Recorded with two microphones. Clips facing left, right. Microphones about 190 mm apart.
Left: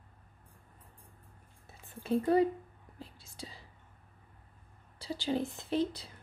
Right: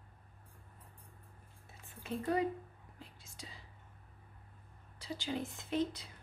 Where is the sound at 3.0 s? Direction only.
35° left (ahead or behind).